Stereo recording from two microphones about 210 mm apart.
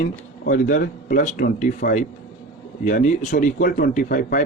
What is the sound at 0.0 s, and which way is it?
Speech, 40° left (ahead or behind).